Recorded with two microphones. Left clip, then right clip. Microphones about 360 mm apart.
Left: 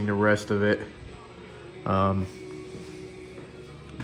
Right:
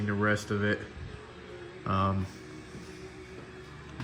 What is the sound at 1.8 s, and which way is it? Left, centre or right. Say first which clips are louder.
Speech: left 5 dB; left.